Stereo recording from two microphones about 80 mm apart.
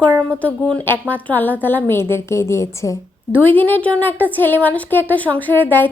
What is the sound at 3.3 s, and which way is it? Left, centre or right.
A woman's voice, left.